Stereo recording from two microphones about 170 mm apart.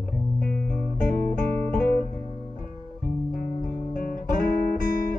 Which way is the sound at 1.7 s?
55° left (ahead or behind).